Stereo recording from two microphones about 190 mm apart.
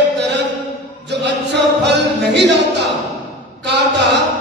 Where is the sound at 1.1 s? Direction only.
65° right (ahead or behind).